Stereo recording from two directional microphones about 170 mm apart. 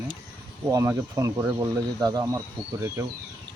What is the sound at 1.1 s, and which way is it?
A woman's voice, 20° right (ahead or behind).